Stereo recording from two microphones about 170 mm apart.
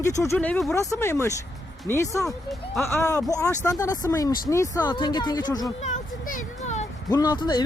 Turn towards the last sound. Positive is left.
turn(degrees=25)  # may be behind; listen again after turning